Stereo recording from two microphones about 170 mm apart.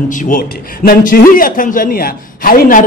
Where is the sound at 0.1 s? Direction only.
50° left (ahead or behind).